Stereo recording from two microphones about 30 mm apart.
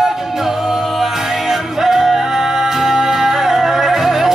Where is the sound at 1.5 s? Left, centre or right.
Centre.